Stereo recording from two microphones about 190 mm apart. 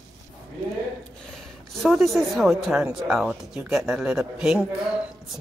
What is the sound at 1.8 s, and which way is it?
A woman's voice, centre (ahead or behind).